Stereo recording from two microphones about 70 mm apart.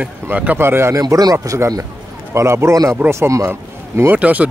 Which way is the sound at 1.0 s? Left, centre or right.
Right.